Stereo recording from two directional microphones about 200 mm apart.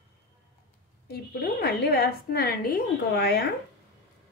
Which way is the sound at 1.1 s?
55° left (ahead or behind).